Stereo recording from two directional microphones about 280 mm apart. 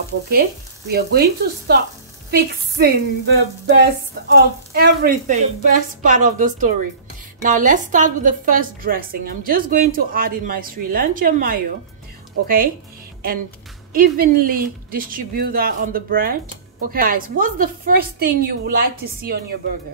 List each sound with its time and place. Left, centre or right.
0.3 s a woman's voice: right